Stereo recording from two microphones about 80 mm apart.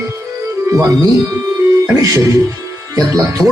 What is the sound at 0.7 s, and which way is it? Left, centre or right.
Speech, right.